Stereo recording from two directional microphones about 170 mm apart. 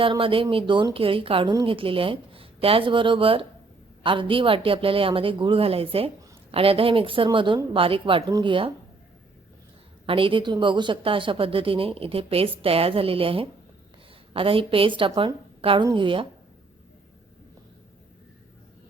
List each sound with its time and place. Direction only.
0.0 s speech: 30° right (ahead or behind)
10.1 s speech: 30° right (ahead or behind)